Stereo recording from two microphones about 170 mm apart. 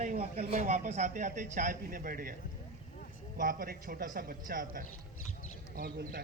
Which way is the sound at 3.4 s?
55° right (ahead or behind).